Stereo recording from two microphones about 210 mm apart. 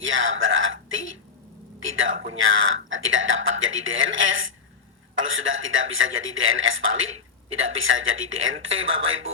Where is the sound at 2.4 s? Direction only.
70° right (ahead or behind).